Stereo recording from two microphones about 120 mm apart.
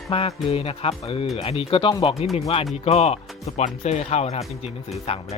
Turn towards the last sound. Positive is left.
turn(degrees=60)  # may be behind; listen again after turning